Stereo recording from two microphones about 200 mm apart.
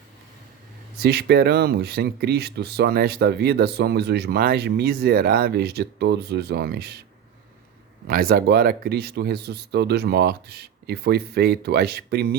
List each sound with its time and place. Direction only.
1.0 s speech: 55° right (ahead or behind)
8.0 s speech: 50° right (ahead or behind)